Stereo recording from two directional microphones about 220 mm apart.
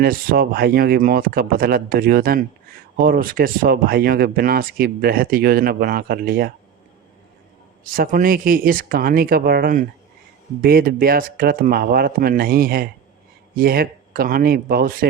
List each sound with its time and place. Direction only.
0.0 s speech: 45° right (ahead or behind)
7.9 s speech: 40° right (ahead or behind)